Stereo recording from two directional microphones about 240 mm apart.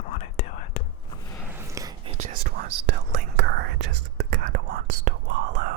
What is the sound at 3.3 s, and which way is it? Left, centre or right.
Whispering, right.